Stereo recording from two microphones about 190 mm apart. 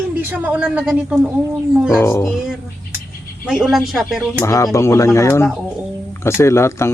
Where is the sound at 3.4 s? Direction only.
Centre (ahead or behind).